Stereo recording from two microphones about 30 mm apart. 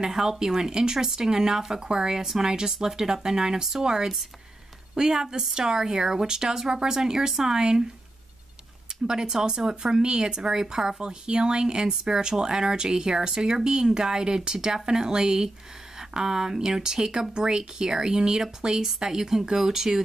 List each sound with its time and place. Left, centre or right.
0.1 s speech: centre
0.4 s speech: centre
2.7 s speech: centre
9.0 s speech: right